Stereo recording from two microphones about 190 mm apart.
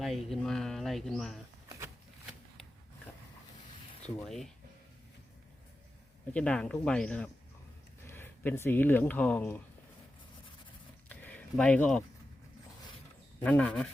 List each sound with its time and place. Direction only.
0.0 s speech: centre (ahead or behind)
4.3 s speech: centre (ahead or behind)
6.3 s speech: 5° left (ahead or behind)
11.1 s a sound: 10° left (ahead or behind)
13.4 s speech: 5° left (ahead or behind)